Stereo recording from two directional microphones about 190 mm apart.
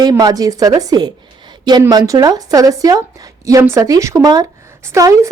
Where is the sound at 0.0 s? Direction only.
20° right (ahead or behind).